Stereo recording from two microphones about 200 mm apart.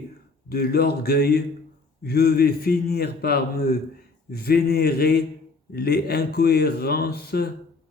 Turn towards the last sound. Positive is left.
turn(degrees=50)  # may be behind; listen again after turning